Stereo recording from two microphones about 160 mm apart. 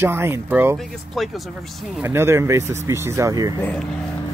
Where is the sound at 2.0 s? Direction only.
15° right (ahead or behind).